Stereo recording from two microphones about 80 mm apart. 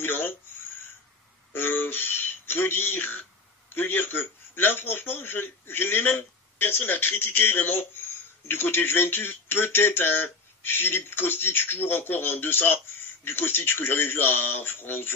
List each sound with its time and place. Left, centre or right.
0.0 s speech: left
1.5 s speech: left